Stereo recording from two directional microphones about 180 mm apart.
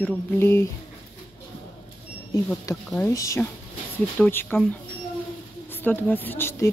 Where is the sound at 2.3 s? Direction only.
15° left (ahead or behind).